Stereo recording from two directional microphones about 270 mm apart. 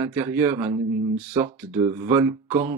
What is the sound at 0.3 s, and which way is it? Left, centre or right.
Speech, centre.